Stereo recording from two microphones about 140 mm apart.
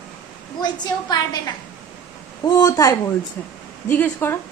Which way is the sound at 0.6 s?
30° left (ahead or behind).